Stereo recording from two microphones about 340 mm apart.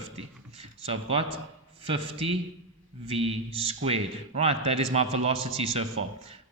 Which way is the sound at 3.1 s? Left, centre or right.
Centre.